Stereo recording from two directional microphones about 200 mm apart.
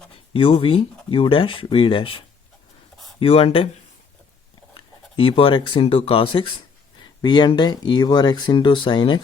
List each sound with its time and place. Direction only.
0.3 s speech: 25° left (ahead or behind)
4.7 s speech: 25° left (ahead or behind)